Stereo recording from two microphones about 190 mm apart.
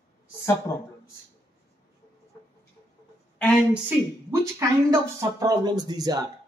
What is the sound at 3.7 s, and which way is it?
Speech, 15° right (ahead or behind).